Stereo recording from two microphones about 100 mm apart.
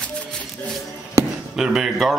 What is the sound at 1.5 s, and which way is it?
Speech, 5° right (ahead or behind).